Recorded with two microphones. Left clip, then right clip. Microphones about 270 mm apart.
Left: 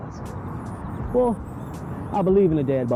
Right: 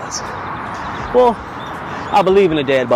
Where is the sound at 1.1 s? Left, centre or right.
Right.